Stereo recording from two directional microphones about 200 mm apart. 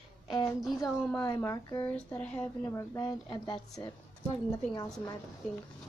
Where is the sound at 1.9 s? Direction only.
10° left (ahead or behind).